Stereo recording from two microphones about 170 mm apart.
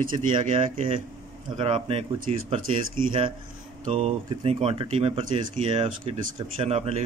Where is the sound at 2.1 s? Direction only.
50° right (ahead or behind).